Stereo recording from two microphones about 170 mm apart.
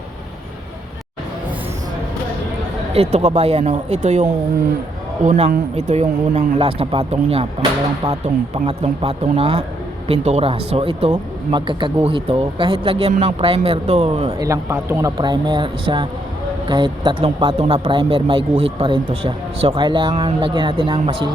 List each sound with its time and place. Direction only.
2.9 s speech: 35° right (ahead or behind)
14.3 s a man's voice: 20° right (ahead or behind)
15.2 s speech: 25° right (ahead or behind)